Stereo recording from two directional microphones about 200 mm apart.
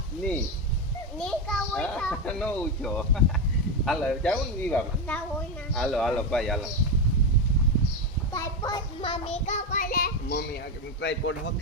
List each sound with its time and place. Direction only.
1.2 s a child's voice: centre (ahead or behind)
8.3 s child singing: 15° left (ahead or behind); by 10.4 s 45° left (ahead or behind)
11.0 s speech: 65° left (ahead or behind)